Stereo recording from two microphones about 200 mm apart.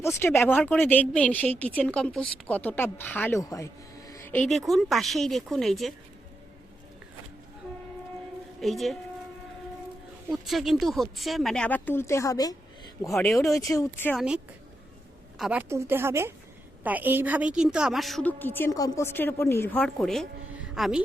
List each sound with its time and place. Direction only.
0.0 s speech: 10° left (ahead or behind)
8.6 s a woman's voice: centre (ahead or behind)
10.3 s a woman's voice: centre (ahead or behind); by 12.5 s 15° left (ahead or behind)
13.1 s a woman's voice: centre (ahead or behind)
13.5 s speech: 15° left (ahead or behind)
14.2 s a woman's voice: 5° right (ahead or behind)